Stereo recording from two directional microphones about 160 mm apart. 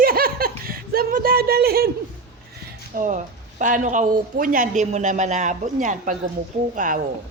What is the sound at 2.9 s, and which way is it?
Speech, 55° right (ahead or behind).